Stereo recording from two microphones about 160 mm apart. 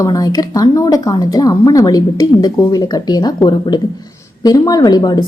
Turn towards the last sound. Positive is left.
turn(degrees=25)  # may be behind; listen again after turning